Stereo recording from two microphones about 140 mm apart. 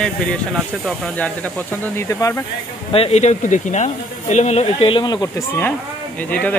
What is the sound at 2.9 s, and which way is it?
Speech, 45° left (ahead or behind).